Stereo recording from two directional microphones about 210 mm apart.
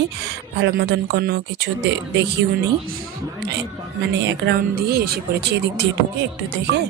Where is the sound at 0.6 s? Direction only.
50° right (ahead or behind).